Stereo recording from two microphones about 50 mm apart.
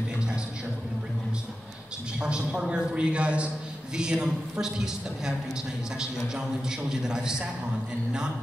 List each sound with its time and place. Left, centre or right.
2.1 s a man's voice: centre